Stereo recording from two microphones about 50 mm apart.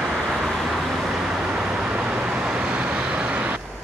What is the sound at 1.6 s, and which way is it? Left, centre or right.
Vehicle, centre.